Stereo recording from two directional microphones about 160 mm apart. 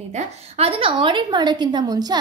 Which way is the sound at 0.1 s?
40° right (ahead or behind).